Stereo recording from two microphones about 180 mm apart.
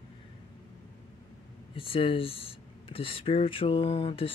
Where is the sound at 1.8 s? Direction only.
30° left (ahead or behind).